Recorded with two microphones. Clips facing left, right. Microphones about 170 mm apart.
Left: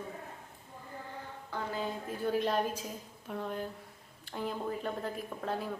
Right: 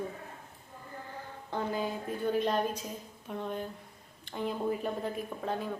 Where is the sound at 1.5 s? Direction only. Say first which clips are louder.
Right 4 dB; 15° right (ahead or behind).